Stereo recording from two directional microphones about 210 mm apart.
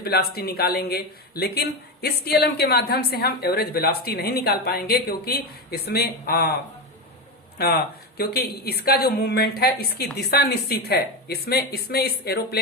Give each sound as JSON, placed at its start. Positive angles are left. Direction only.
{"t": 0.0, "sound": "speech", "side_deg": 50}
{"t": 8.2, "sound": "speech", "side_deg": 50}